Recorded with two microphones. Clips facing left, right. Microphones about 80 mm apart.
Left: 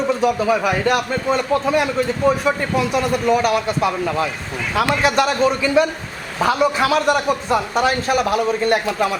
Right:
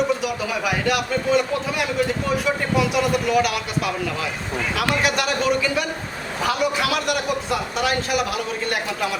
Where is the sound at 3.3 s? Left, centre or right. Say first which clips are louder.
Left 4 dB; left.